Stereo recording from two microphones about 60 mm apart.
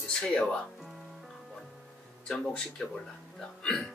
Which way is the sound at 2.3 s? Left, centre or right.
Centre.